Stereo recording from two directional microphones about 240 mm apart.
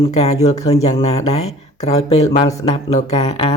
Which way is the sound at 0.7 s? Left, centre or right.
Left.